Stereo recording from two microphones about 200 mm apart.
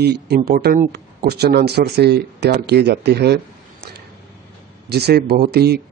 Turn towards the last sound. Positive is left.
turn(degrees=-55)  # may be behind; listen again after turning